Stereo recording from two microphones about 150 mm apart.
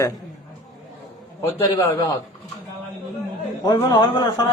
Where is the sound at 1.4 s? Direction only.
15° left (ahead or behind).